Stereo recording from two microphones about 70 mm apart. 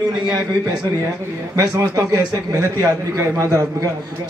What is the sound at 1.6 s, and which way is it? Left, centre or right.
A man's voice, right.